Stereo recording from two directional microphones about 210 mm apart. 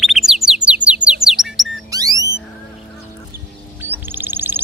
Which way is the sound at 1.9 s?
15° right (ahead or behind).